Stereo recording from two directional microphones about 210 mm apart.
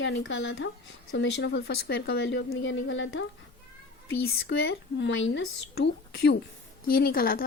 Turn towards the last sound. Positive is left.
turn(degrees=45)  # may be behind; listen again after turning